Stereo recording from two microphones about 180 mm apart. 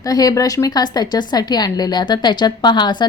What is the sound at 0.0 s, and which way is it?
A woman's voice, 20° left (ahead or behind).